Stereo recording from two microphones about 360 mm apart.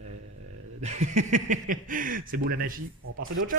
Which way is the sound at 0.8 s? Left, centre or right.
Centre.